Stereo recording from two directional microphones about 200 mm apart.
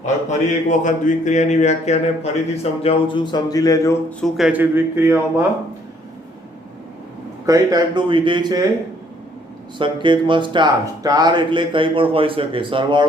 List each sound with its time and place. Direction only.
0.0 s speech: 35° left (ahead or behind); by 3.9 s 20° left (ahead or behind)
4.2 s speech: centre (ahead or behind)
7.4 s speech: 15° right (ahead or behind)
9.7 s speech: 25° right (ahead or behind)